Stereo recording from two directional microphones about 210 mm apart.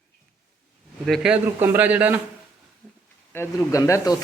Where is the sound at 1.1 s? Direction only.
5° right (ahead or behind).